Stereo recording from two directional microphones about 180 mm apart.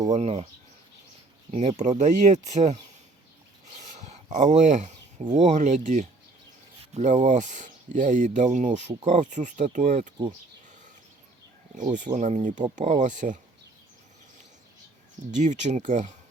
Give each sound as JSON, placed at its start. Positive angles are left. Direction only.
{"t": 0.1, "sound": "speech", "side_deg": -35}
{"t": 1.5, "sound": "speech", "side_deg": -35}
{"t": 3.8, "sound": "a sound", "side_deg": -40}
{"t": 5.3, "sound": "speech", "side_deg": -40}
{"t": 11.8, "sound": "speech", "side_deg": -45}
{"t": 15.3, "sound": "speech", "side_deg": -40}